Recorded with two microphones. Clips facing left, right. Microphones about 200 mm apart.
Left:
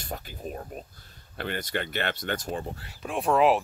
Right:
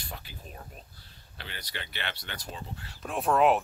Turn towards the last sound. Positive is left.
turn(degrees=0)  # may be behind; listen again after turning